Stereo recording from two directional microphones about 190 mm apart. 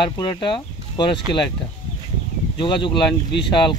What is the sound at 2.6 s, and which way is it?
A man's voice, 25° left (ahead or behind).